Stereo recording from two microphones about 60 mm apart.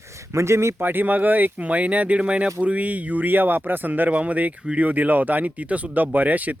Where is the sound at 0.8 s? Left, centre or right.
Right; by 4.8 s centre.